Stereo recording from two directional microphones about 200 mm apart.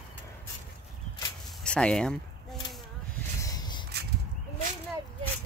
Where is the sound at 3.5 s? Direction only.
20° left (ahead or behind).